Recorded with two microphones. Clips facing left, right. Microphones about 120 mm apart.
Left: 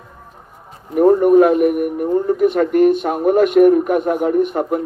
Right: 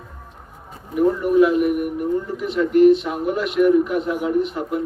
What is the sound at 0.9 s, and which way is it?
A man's voice, 50° left (ahead or behind).